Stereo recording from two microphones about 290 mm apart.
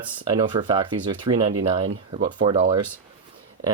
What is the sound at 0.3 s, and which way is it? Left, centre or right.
Speech, centre.